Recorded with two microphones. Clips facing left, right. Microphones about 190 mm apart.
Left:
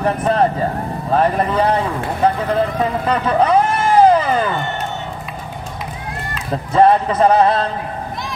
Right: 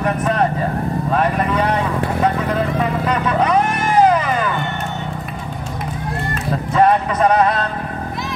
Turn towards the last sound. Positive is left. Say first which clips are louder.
# left 2 dB
turn(degrees=30)  # may be behind; listen again after turning